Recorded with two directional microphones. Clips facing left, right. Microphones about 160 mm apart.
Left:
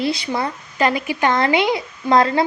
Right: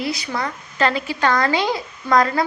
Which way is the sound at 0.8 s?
15° left (ahead or behind).